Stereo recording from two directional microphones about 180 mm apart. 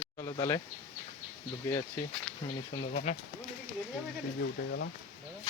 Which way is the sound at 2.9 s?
40° left (ahead or behind).